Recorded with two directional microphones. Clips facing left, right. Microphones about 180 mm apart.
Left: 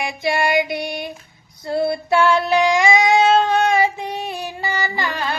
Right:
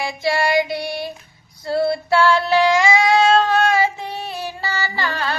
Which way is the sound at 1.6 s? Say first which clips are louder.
Right 1 dB; 20° left (ahead or behind).